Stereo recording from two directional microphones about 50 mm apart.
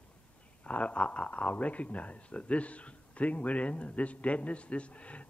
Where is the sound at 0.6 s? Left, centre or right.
Left.